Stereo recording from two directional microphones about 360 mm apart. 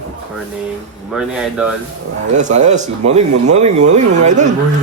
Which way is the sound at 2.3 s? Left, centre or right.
Centre.